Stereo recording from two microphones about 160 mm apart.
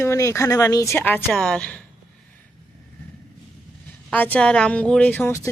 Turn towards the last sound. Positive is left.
turn(degrees=10)  # may be behind; listen again after turning